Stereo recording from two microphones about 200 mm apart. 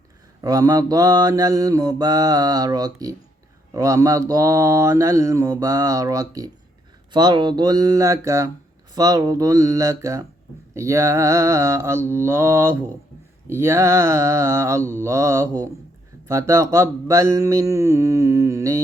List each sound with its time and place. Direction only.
0.4 s mantra: 20° right (ahead or behind)
3.8 s speech: 15° right (ahead or behind)
7.1 s mantra: 20° right (ahead or behind)
9.0 s speech: 20° right (ahead or behind)